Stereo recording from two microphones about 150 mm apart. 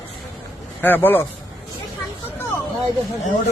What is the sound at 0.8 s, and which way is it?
Speech, 15° left (ahead or behind).